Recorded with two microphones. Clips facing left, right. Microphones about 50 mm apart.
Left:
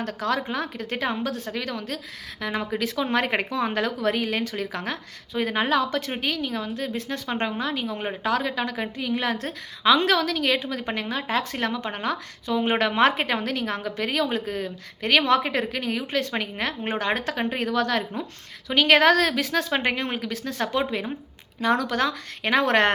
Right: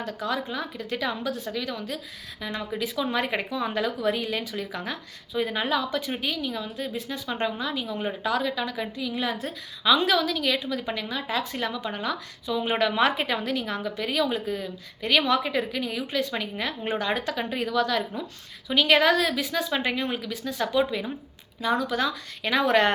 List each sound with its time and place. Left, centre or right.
0.0 s a woman's voice: left
21.6 s a woman's voice: left
22.0 s a woman's voice: left